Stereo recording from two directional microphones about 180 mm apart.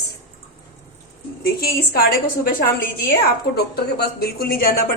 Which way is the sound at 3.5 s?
60° left (ahead or behind).